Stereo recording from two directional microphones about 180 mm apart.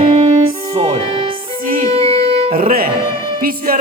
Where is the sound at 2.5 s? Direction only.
55° right (ahead or behind).